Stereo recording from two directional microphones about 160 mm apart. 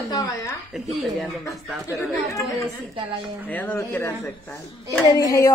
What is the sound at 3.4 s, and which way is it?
A woman's voice, 10° left (ahead or behind).